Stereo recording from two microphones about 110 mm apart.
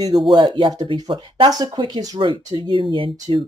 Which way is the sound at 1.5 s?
40° right (ahead or behind).